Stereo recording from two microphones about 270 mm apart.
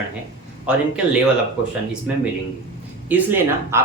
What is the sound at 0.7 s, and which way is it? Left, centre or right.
Speech, centre.